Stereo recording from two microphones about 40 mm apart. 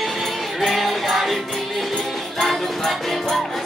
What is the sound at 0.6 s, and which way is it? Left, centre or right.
Music, centre.